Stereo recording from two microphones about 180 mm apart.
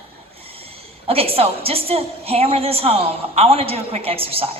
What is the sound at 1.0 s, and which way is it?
A woman's voice, 35° right (ahead or behind).